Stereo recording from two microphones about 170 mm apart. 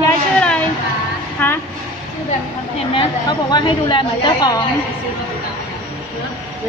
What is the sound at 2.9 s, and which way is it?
A woman's voice, 25° left (ahead or behind).